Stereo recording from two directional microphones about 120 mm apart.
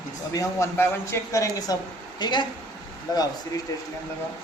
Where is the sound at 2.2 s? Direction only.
40° left (ahead or behind).